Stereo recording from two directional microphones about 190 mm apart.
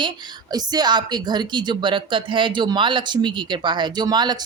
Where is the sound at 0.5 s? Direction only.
20° right (ahead or behind).